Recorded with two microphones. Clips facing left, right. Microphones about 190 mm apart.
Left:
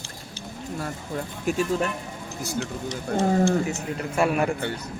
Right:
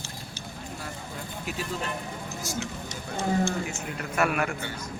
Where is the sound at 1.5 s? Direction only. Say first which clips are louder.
Left 11 dB; 45° left (ahead or behind).